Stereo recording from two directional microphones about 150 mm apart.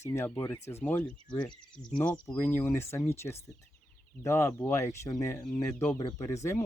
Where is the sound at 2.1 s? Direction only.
30° left (ahead or behind).